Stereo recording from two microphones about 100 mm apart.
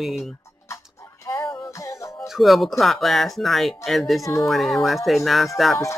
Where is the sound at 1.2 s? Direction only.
30° left (ahead or behind).